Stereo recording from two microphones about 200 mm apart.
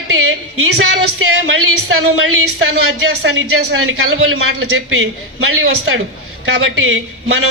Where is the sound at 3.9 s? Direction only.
90° right.